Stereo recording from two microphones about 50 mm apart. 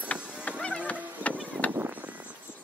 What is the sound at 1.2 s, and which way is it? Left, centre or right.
Vehicle, right.